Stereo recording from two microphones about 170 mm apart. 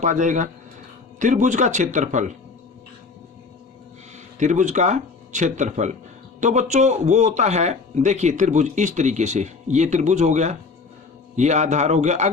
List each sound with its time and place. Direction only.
0.0 s a man's voice: 45° right (ahead or behind)
4.4 s a man's voice: 45° right (ahead or behind)